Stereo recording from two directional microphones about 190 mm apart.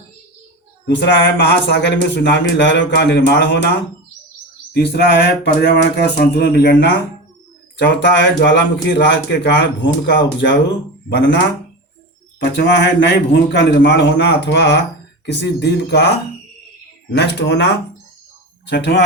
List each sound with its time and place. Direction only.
0.9 s speech: 65° left (ahead or behind)
4.7 s speech: 60° left (ahead or behind)
12.4 s speech: 65° left (ahead or behind)